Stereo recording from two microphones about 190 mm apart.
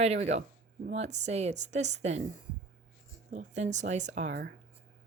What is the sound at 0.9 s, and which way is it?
A woman's voice, 35° right (ahead or behind).